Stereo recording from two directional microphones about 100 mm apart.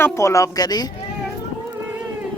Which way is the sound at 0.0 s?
30° left (ahead or behind).